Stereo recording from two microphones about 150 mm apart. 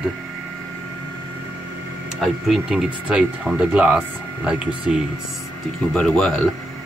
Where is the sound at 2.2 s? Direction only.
5° right (ahead or behind).